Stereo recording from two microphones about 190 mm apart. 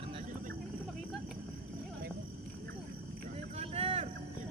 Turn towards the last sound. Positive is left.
turn(degrees=-30)  # may be behind; listen again after turning